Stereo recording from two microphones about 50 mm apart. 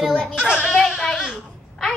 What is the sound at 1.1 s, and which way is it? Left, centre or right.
Babbling, centre.